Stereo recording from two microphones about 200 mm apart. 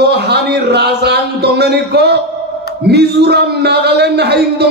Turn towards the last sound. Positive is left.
turn(degrees=-55)  # may be behind; listen again after turning